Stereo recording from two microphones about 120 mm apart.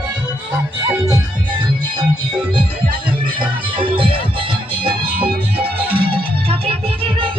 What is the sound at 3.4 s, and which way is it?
Music, 45° right (ahead or behind).